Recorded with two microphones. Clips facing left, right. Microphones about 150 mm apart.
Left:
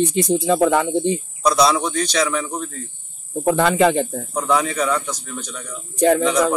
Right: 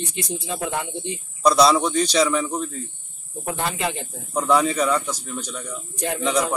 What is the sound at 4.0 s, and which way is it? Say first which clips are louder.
Speech: left 13 dB; 65° left (ahead or behind).